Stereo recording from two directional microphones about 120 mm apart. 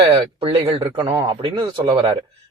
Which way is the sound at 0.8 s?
35° right (ahead or behind).